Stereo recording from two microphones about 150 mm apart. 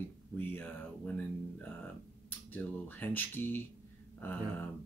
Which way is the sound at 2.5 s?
10° left (ahead or behind).